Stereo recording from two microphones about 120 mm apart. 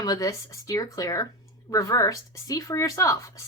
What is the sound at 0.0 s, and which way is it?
Speech, 30° left (ahead or behind).